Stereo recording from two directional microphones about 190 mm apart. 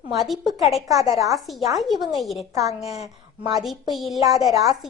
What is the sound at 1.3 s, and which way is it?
Speech, centre (ahead or behind).